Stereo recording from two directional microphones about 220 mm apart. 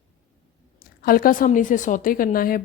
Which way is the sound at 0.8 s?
40° left (ahead or behind).